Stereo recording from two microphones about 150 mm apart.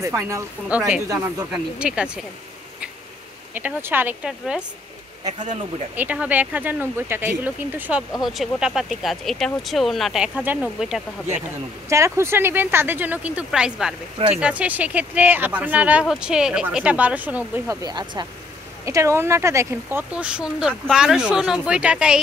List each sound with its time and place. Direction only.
0.0 s speech: 20° right (ahead or behind)
1.0 s speech: 20° right (ahead or behind)
1.5 s speech: 5° right (ahead or behind)
3.5 s speech: 15° right (ahead or behind)
5.4 s speech: 55° right (ahead or behind)
5.9 s speech: 10° right (ahead or behind)
11.9 s speech: 20° right (ahead or behind)
17.8 s speech: 30° right (ahead or behind); by 22.2 s 5° right (ahead or behind)